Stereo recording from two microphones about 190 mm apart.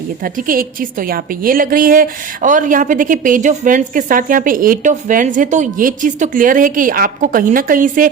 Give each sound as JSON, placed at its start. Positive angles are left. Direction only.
{"t": 0.2, "sound": "a woman's voice", "side_deg": -50}